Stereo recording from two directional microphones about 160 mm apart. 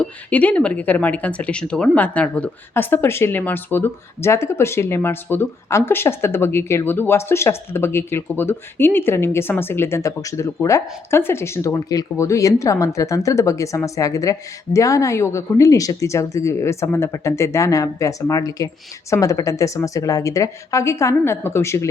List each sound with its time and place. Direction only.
0.0 s speech: 10° left (ahead or behind)